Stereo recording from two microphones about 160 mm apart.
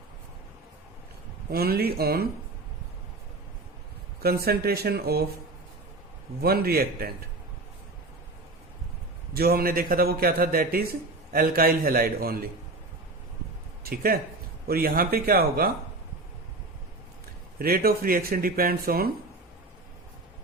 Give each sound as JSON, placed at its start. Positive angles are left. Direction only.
{"t": 1.5, "sound": "a man's voice", "side_deg": -70}
{"t": 4.2, "sound": "a man's voice", "side_deg": -75}
{"t": 6.4, "sound": "a man's voice", "side_deg": -75}
{"t": 9.3, "sound": "a man's voice", "side_deg": -75}
{"t": 13.8, "sound": "a man's voice", "side_deg": -70}
{"t": 17.6, "sound": "a man's voice", "side_deg": -70}